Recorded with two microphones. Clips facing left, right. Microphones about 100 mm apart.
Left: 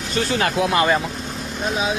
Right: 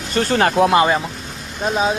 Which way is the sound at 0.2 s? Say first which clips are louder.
Right 5 dB; 45° right (ahead or behind).